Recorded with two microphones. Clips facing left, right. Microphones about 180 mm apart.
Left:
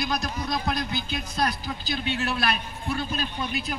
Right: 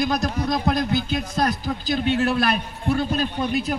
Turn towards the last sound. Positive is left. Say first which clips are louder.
# right 7 dB
turn(degrees=-50)  # may be behind; listen again after turning